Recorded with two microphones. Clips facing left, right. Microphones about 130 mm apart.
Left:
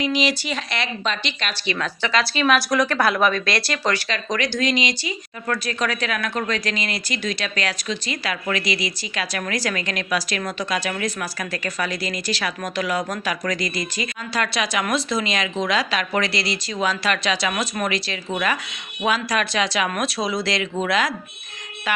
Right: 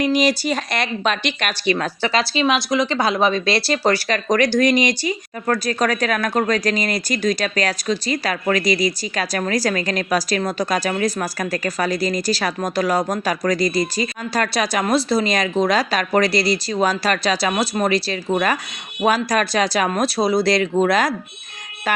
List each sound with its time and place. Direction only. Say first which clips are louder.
0.0 s speech: right 5 dB; 45° right (ahead or behind)
1.7 s speech: right 2 dB; 35° right (ahead or behind)
2.9 s speech: right 1 dB; 20° right (ahead or behind); by 21.1 s 40° right (ahead or behind)
21.9 s siren: right 3 dB; 40° right (ahead or behind)